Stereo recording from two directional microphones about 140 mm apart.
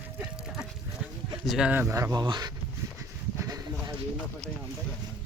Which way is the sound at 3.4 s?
25° right (ahead or behind).